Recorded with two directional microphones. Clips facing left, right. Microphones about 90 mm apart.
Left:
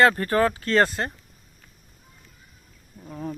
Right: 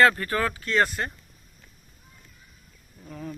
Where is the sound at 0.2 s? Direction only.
35° left (ahead or behind).